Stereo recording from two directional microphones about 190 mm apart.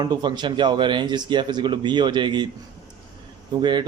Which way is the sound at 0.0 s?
25° right (ahead or behind).